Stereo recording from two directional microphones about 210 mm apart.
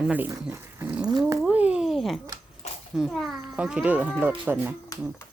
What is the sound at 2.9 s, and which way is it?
Speech, centre (ahead or behind).